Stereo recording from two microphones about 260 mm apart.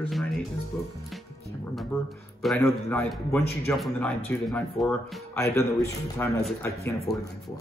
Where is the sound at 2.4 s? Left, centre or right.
Centre.